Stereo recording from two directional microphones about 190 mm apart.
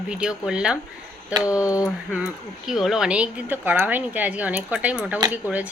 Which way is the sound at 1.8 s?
5° right (ahead or behind).